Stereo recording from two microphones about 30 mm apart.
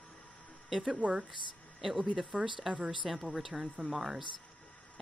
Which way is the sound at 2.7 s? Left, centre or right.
Right.